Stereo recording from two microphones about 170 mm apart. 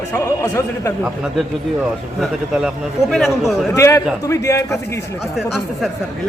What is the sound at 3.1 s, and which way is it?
Speech, centre (ahead or behind).